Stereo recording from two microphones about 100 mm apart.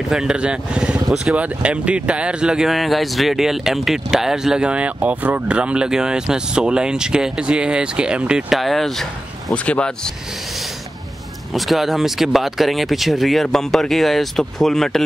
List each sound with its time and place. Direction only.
0.1 s speech: 5° right (ahead or behind); by 10.1 s 10° left (ahead or behind)
11.5 s speech: centre (ahead or behind)